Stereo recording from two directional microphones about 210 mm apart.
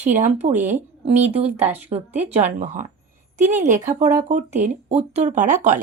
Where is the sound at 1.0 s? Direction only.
30° right (ahead or behind).